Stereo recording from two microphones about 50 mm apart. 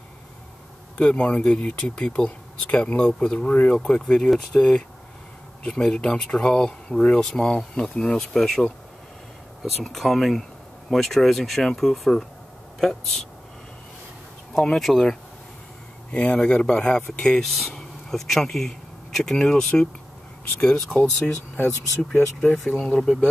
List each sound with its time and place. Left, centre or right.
0.9 s speech: left
3.7 s speech: centre
14.5 s speech: centre
16.1 s speech: left
17.4 s speech: centre
22.1 s speech: left
22.8 s speech: centre